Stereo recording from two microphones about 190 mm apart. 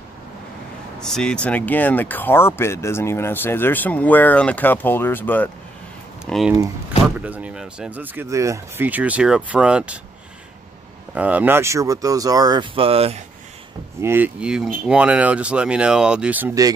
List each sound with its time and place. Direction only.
0.9 s speech: 5° left (ahead or behind)
11.1 s speech: 10° right (ahead or behind); by 13.2 s 30° right (ahead or behind)
14.0 s speech: 10° right (ahead or behind)